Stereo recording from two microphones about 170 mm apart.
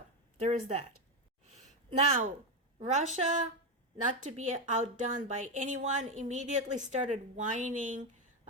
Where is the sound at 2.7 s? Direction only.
45° right (ahead or behind).